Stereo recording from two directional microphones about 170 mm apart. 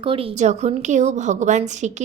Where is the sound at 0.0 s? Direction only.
30° right (ahead or behind).